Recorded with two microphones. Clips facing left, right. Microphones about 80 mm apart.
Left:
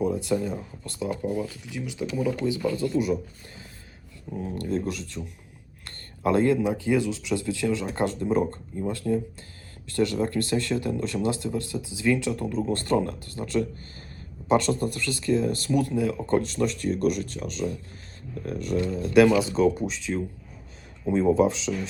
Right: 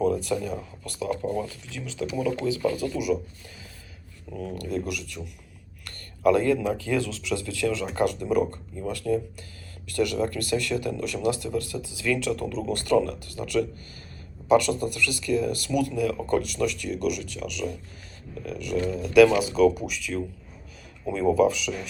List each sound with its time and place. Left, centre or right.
0.0 s speech: centre
4.4 s speech: left